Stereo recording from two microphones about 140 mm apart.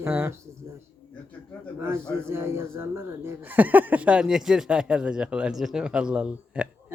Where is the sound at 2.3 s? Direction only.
20° right (ahead or behind).